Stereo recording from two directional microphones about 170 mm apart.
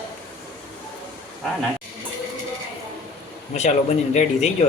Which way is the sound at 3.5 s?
40° left (ahead or behind).